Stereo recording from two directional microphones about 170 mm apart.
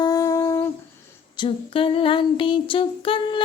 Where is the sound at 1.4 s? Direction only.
30° left (ahead or behind).